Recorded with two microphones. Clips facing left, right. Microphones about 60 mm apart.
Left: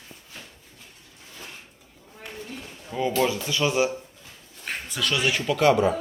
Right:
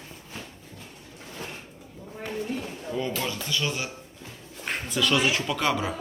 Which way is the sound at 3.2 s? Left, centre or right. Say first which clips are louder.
Left 6 dB; centre.